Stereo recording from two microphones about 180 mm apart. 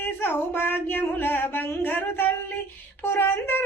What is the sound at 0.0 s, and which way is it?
A woman's voice, 10° left (ahead or behind).